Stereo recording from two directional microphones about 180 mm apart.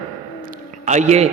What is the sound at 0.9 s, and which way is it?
Speech, 40° right (ahead or behind).